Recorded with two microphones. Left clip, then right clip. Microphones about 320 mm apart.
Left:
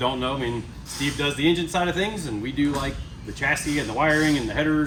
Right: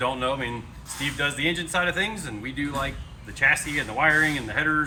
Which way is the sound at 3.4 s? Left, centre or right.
Centre.